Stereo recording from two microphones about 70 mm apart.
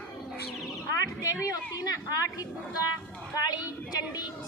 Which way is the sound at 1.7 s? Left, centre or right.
Left.